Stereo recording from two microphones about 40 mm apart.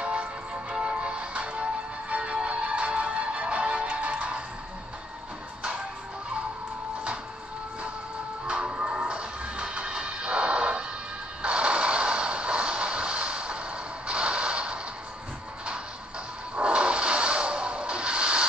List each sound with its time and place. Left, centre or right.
0.0 s music: right
8.5 s music: right
11.4 s mechanisms: right
14.0 s creak: right
16.5 s a sound: right